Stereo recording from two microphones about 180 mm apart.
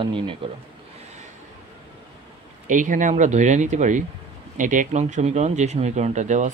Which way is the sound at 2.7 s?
45° right (ahead or behind).